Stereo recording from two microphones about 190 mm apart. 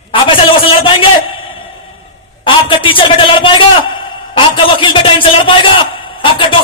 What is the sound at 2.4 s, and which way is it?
A man's voice, 25° left (ahead or behind).